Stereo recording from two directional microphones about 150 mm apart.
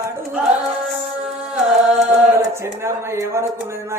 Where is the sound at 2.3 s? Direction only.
20° right (ahead or behind).